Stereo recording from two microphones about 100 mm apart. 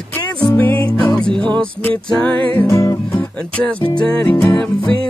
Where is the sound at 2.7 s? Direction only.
30° left (ahead or behind).